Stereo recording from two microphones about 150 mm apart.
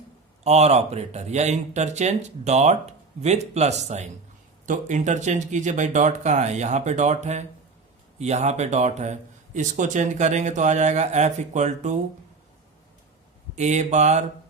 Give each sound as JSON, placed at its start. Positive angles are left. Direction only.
{"t": 0.4, "sound": "speech", "side_deg": -45}
{"t": 13.6, "sound": "speech", "side_deg": -50}